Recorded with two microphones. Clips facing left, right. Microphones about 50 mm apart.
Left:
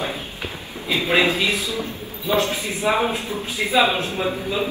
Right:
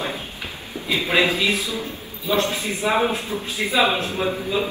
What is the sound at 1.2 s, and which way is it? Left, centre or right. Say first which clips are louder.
Speech: even; left.